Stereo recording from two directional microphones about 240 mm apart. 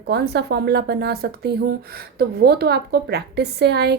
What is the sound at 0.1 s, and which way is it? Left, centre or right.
A woman's voice, right.